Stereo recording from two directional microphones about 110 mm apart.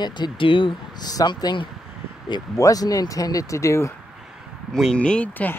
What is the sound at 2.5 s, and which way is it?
Speech, 30° left (ahead or behind).